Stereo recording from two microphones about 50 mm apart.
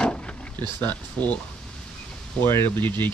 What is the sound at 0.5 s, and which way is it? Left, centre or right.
Speech, left.